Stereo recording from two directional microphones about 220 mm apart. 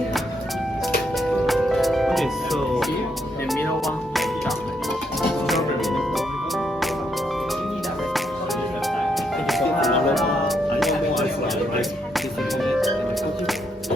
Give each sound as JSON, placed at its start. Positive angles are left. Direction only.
{"t": 1.5, "sound": "music", "side_deg": 0}
{"t": 9.5, "sound": "music", "side_deg": 0}